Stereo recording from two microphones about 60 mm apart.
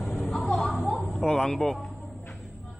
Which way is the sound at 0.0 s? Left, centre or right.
Centre.